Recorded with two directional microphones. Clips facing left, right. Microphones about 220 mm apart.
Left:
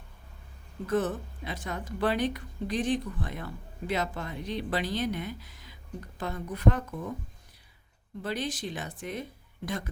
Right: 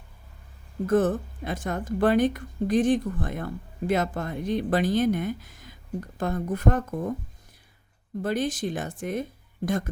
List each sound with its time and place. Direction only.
0.9 s speech: 50° right (ahead or behind)
8.2 s speech: 50° right (ahead or behind)